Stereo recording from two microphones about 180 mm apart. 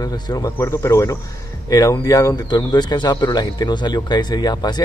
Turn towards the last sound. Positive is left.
turn(degrees=20)  # may be behind; listen again after turning